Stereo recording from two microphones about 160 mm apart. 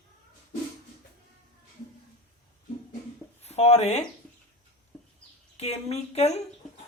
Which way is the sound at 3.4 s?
45° left (ahead or behind).